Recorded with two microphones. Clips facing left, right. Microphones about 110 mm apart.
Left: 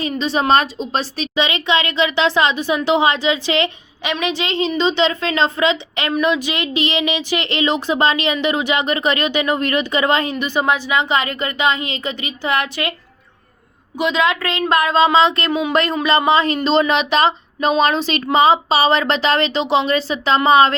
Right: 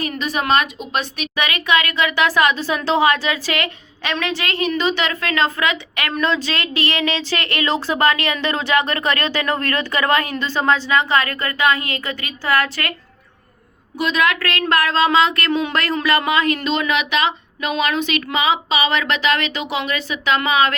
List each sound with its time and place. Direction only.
0.0 s speech: 25° left (ahead or behind)
14.0 s speech: 20° left (ahead or behind)